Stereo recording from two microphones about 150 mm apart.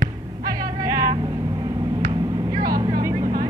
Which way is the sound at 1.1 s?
25° right (ahead or behind).